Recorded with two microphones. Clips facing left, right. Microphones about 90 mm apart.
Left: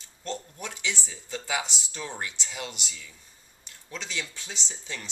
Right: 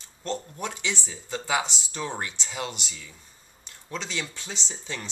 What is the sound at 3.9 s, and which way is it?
Speech, 35° right (ahead or behind).